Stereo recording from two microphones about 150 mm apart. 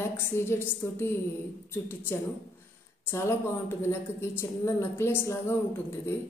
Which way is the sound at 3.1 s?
15° left (ahead or behind).